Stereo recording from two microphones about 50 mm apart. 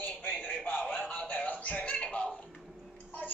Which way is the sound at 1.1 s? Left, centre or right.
Left.